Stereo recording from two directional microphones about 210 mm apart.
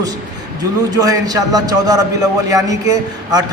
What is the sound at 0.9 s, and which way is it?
A man's voice, 15° right (ahead or behind).